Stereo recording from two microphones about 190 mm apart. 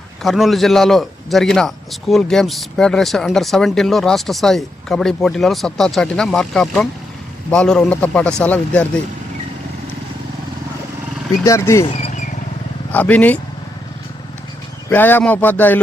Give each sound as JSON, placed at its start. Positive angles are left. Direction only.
{"t": 0.2, "sound": "a man's voice", "side_deg": 0}
{"t": 11.4, "sound": "a man's voice", "side_deg": 15}
{"t": 11.9, "sound": "vehicle", "side_deg": 35}
{"t": 12.9, "sound": "a man's voice", "side_deg": 10}
{"t": 14.8, "sound": "a man's voice", "side_deg": 10}